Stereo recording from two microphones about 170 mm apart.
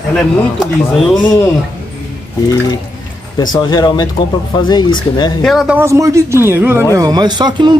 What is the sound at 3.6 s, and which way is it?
Speech, 25° left (ahead or behind).